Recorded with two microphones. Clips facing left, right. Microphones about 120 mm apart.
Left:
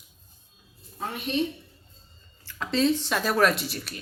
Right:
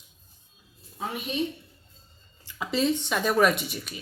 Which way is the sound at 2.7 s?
Centre (ahead or behind).